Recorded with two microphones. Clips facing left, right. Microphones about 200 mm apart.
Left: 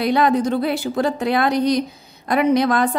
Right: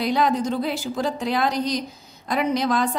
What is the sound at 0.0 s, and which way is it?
A woman's voice, 60° left (ahead or behind).